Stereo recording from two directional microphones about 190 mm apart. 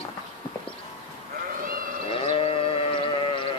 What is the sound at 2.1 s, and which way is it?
Sheep, 30° left (ahead or behind).